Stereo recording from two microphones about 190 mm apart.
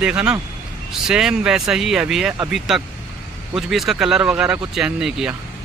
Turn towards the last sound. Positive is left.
turn(degrees=-5)  # may be behind; listen again after turning